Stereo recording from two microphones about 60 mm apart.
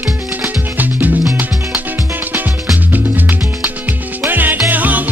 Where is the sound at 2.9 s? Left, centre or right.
Right.